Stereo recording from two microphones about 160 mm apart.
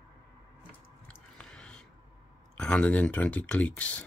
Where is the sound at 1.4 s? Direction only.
5° left (ahead or behind).